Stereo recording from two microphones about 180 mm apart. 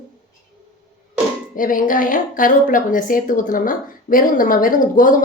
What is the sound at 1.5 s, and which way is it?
A woman's voice, 50° left (ahead or behind).